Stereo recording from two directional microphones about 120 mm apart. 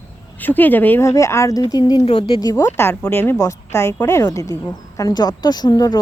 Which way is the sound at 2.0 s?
50° left (ahead or behind).